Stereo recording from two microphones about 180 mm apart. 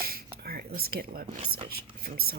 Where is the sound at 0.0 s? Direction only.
55° right (ahead or behind).